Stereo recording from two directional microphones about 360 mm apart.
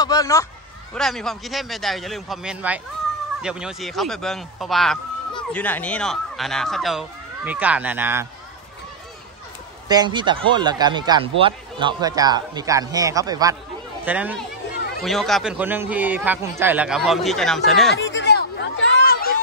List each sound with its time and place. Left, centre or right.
0.0 s a man's voice: centre
9.8 s speech: centre
17.9 s chatter: left